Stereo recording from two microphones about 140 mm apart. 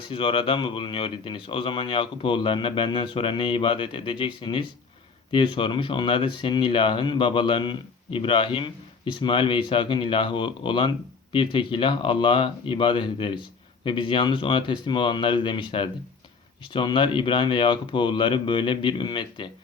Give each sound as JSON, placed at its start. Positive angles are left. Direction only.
{"t": 0.1, "sound": "speech", "side_deg": 40}